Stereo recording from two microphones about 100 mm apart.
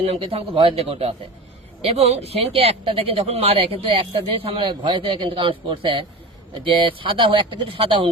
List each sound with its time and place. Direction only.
0.0 s speech: 70° right (ahead or behind)
1.8 s speech: 85° right; by 8.1 s 55° right (ahead or behind)